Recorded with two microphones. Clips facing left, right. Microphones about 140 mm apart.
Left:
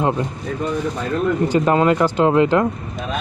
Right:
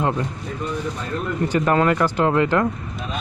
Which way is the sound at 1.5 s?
20° left (ahead or behind).